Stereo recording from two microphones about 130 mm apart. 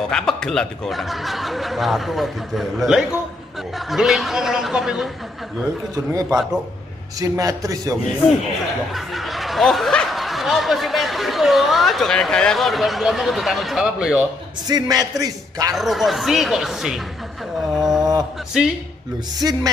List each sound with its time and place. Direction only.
0.1 s speech: 5° left (ahead or behind)
7.2 s a man's voice: 25° right (ahead or behind)
8.9 s speech: centre (ahead or behind)
14.7 s a man's voice: 30° right (ahead or behind)
15.7 s speech: centre (ahead or behind)
17.7 s a sound: 5° right (ahead or behind)
18.6 s speech: 5° right (ahead or behind)
19.3 s a man's voice: 30° right (ahead or behind)